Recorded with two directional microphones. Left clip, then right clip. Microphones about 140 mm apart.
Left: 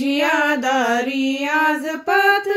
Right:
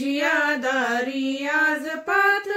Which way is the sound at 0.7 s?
35° left (ahead or behind).